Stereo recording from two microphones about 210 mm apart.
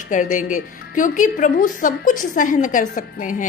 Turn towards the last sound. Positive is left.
turn(degrees=40)  # may be behind; listen again after turning